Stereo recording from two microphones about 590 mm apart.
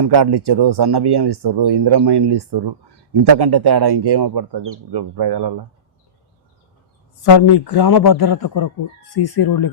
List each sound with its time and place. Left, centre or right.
0.0 s speech: right
7.2 s a man's voice: left